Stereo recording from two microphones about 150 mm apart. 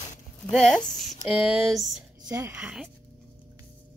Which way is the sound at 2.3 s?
20° right (ahead or behind).